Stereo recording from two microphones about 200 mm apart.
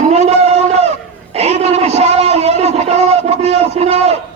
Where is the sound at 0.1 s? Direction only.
35° right (ahead or behind).